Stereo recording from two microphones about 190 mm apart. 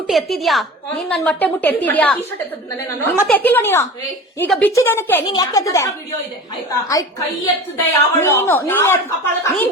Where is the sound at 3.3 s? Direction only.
10° left (ahead or behind).